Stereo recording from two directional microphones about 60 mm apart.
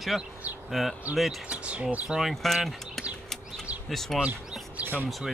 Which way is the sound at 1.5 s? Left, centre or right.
Centre.